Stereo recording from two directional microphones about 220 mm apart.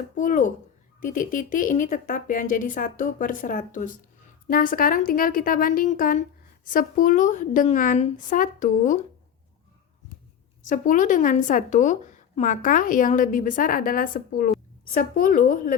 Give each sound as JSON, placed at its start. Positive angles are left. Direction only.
{"t": 0.2, "sound": "speech", "side_deg": 35}
{"t": 10.6, "sound": "speech", "side_deg": 35}